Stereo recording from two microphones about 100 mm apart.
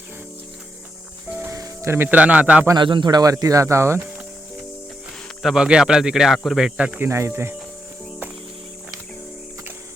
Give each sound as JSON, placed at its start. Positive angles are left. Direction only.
{"t": 1.3, "sound": "music", "side_deg": -20}
{"t": 1.5, "sound": "speech", "side_deg": -30}
{"t": 2.7, "sound": "speech", "side_deg": -50}
{"t": 5.4, "sound": "speech", "side_deg": -5}
{"t": 7.0, "sound": "speech", "side_deg": -25}